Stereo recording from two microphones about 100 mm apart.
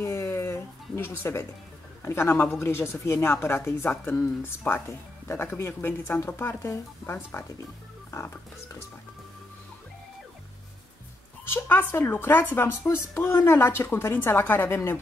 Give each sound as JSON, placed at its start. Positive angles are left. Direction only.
{"t": 0.0, "sound": "a sound", "side_deg": 25}
{"t": 2.0, "sound": "a woman's voice", "side_deg": 25}
{"t": 11.4, "sound": "a woman's voice", "side_deg": 20}